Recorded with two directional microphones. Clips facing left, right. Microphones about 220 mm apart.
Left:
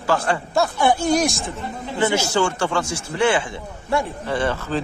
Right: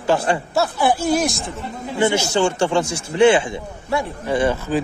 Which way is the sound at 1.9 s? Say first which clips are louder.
Right 2 dB; 20° right (ahead or behind).